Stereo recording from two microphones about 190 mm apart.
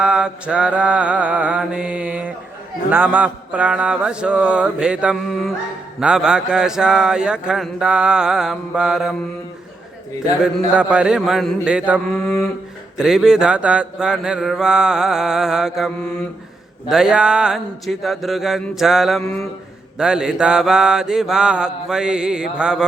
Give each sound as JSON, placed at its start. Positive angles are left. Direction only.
{"t": 0.0, "sound": "mantra", "side_deg": -5}
{"t": 10.8, "sound": "mantra", "side_deg": -5}